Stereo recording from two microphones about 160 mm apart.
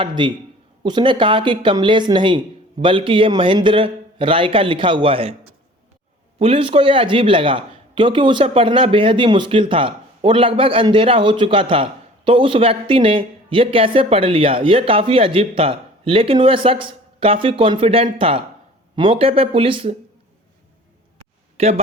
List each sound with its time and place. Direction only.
0.0 s speech: 30° right (ahead or behind)
6.4 s speech: 35° right (ahead or behind)
21.6 s speech: 40° right (ahead or behind)